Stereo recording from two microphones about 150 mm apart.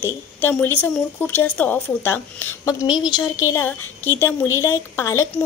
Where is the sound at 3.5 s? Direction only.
15° left (ahead or behind).